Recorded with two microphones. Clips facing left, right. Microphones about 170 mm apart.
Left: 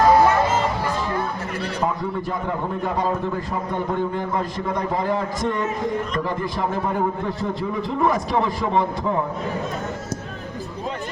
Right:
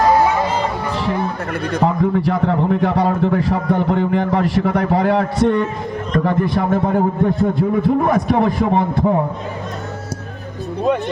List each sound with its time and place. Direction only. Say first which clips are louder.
1.7 s a man's voice: right 9 dB; 75° right (ahead or behind); by 9.1 s 55° right (ahead or behind)